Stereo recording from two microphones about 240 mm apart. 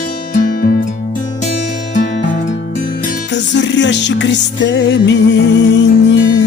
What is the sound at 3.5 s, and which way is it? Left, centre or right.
Music, left.